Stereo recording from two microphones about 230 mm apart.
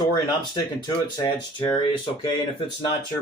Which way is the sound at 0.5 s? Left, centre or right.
Centre.